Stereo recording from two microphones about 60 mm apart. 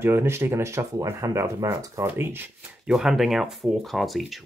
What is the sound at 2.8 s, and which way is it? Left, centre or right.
Speech, centre.